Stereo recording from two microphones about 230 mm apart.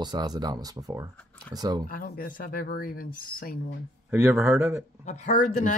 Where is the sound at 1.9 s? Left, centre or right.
Left.